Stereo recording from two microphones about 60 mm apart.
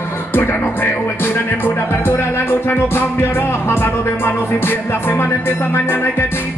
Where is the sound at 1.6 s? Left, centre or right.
Left.